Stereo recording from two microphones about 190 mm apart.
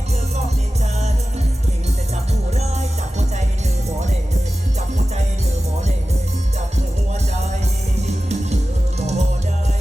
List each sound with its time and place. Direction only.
2.5 s music: 35° right (ahead or behind)
8.0 s music: 35° right (ahead or behind)